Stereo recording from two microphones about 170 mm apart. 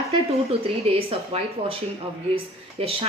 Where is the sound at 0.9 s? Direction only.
35° right (ahead or behind).